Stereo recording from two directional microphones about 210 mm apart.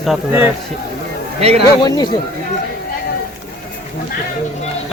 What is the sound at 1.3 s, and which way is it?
Speech, 30° right (ahead or behind).